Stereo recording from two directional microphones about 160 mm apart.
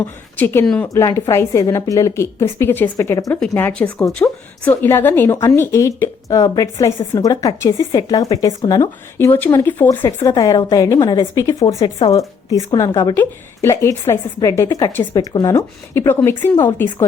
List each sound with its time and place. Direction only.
0.3 s a woman's voice: 10° left (ahead or behind)